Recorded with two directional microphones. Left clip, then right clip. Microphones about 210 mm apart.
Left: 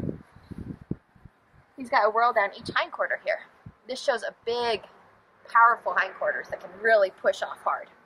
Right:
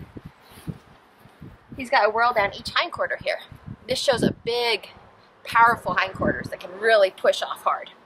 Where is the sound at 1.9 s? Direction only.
25° right (ahead or behind).